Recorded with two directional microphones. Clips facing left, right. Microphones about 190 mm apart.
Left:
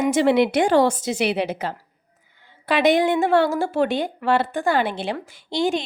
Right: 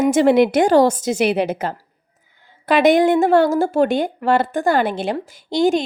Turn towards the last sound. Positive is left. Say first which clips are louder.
# right 5 dB
turn(degrees=-45)  # may be behind; listen again after turning